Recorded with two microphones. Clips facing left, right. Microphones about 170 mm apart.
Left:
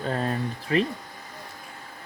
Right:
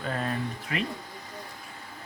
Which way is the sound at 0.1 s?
35° left (ahead or behind).